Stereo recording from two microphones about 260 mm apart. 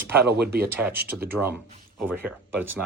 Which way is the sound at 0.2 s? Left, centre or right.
Right.